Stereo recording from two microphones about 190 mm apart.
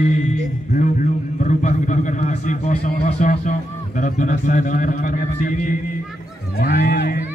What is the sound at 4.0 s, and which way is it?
A man's voice, 40° left (ahead or behind).